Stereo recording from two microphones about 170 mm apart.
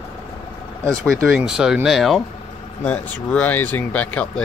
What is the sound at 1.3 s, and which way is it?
Speech, 5° right (ahead or behind).